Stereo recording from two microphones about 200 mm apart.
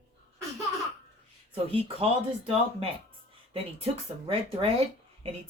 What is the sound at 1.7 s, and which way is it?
A woman's voice, 30° right (ahead or behind).